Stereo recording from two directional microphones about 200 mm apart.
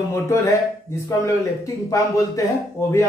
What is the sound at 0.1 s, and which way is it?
Speech, 15° left (ahead or behind).